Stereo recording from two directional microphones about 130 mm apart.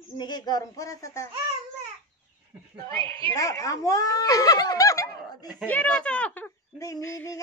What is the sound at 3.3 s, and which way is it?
Speech, 25° left (ahead or behind).